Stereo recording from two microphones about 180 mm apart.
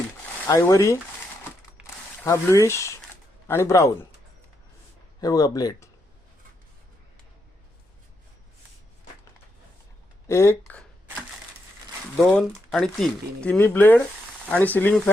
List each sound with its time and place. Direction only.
0.4 s speech: 20° left (ahead or behind)
2.2 s speech: 15° left (ahead or behind)
5.2 s speech: 20° left (ahead or behind)
10.2 s speech: 15° left (ahead or behind)
12.3 s speech: 5° left (ahead or behind)